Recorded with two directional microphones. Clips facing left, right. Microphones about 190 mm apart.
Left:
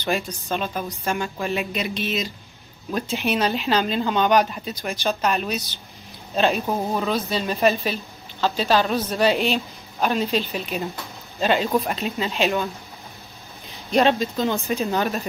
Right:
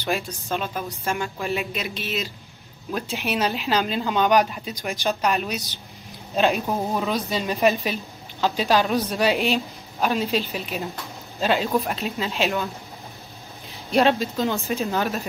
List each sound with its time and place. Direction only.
0.5 s speech: centre (ahead or behind)
4.9 s speech: 15° right (ahead or behind)
6.6 s speech: centre (ahead or behind)
7.1 s a woman's voice: 15° right (ahead or behind)
9.2 s speech: centre (ahead or behind)
13.9 s speech: centre (ahead or behind)